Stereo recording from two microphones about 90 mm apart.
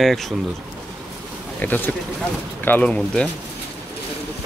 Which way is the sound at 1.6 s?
20° left (ahead or behind).